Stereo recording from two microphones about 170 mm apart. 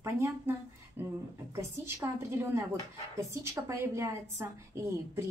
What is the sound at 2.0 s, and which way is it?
Speech, 15° right (ahead or behind).